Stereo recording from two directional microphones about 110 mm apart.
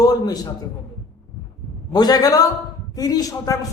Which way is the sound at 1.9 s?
40° left (ahead or behind).